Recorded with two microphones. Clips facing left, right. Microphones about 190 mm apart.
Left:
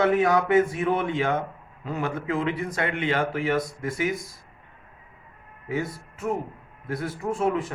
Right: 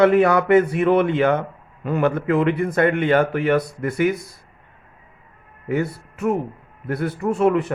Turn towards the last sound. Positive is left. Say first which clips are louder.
# right 7 dB
turn(degrees=-65)  # may be behind; listen again after turning